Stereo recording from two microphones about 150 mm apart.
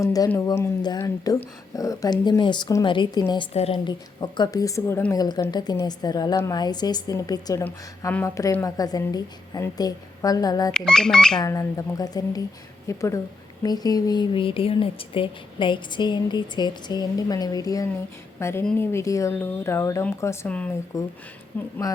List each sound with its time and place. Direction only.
0.0 s speech: 25° left (ahead or behind)
3.5 s a woman's voice: 45° left (ahead or behind)
3.8 s speech: 30° left (ahead or behind)
10.7 s speech: 5° left (ahead or behind)
11.3 s a woman's voice: 20° left (ahead or behind)
20.9 s speech: 20° left (ahead or behind)